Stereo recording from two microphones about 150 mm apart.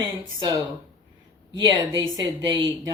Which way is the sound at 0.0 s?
25° right (ahead or behind).